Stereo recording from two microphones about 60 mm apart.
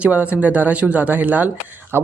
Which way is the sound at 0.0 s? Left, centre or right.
Right.